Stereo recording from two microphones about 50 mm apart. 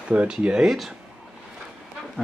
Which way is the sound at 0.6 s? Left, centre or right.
Centre.